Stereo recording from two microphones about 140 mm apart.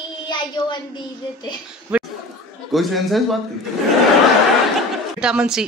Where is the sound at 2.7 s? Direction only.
Centre (ahead or behind).